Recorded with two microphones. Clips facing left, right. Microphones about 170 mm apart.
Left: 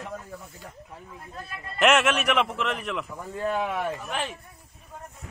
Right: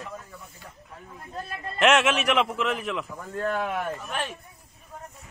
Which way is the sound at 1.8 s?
Centre (ahead or behind).